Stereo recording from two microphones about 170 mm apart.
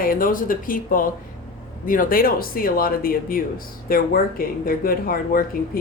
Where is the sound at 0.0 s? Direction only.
55° left (ahead or behind).